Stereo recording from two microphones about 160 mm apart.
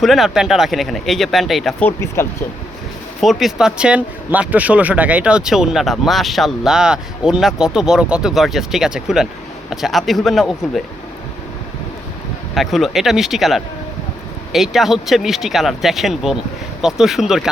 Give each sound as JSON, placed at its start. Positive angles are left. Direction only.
{"t": 0.0, "sound": "speech", "side_deg": 0}
{"t": 1.8, "sound": "speech", "side_deg": 15}
{"t": 3.2, "sound": "speech", "side_deg": 0}
{"t": 12.5, "sound": "speech", "side_deg": 0}